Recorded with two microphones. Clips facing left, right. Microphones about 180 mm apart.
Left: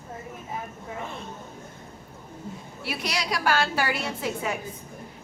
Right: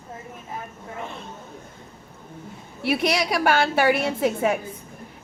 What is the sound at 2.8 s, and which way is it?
A woman's voice, 60° right (ahead or behind).